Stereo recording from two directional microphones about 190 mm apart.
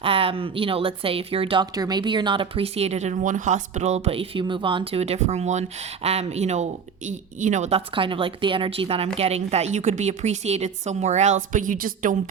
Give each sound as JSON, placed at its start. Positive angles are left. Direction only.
{"t": 0.0, "sound": "a woman's voice", "side_deg": -30}